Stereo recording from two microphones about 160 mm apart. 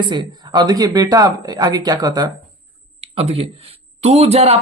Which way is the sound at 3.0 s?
40° right (ahead or behind).